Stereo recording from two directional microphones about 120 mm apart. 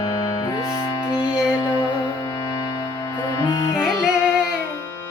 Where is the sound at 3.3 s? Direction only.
25° left (ahead or behind).